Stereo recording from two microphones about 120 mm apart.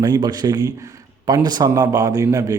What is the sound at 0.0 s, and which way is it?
A man's voice, 35° right (ahead or behind).